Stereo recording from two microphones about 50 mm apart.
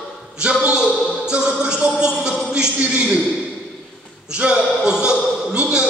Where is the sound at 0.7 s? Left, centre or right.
Centre.